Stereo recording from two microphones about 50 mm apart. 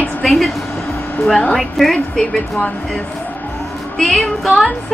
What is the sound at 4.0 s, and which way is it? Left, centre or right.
Music, centre.